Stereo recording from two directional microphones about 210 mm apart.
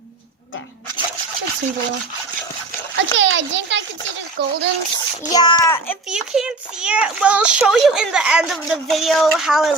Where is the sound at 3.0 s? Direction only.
65° right (ahead or behind).